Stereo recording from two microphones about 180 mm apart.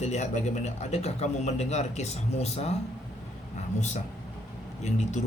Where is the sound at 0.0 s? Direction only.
40° left (ahead or behind).